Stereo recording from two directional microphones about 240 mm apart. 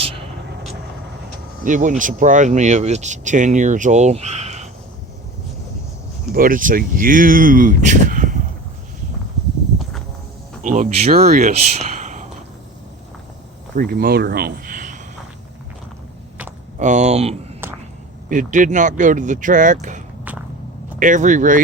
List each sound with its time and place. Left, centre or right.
1.6 s speech: right
6.3 s speech: right
10.6 s speech: right
11.9 s a sound: right
13.7 s speech: right
16.7 s speech: right
21.0 s speech: right